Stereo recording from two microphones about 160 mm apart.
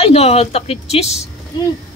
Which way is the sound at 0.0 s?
40° left (ahead or behind).